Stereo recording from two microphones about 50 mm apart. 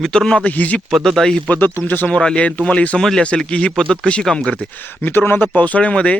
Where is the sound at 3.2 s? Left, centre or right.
Left.